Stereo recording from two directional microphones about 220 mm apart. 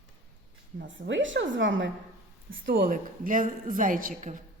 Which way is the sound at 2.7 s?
40° right (ahead or behind).